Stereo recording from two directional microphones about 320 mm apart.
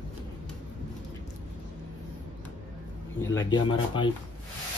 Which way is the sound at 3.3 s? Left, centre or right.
Centre.